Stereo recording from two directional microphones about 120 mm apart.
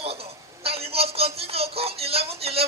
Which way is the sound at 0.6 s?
55° right (ahead or behind).